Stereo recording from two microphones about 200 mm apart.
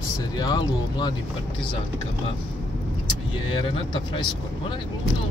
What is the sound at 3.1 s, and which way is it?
Speech, 25° left (ahead or behind).